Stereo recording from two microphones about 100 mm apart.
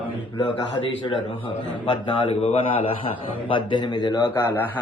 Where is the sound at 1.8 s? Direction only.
75° left (ahead or behind).